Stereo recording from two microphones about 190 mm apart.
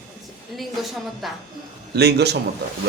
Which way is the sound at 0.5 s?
Centre (ahead or behind).